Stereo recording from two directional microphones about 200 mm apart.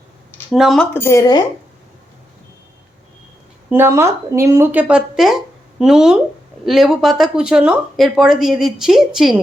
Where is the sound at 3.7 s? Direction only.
10° right (ahead or behind).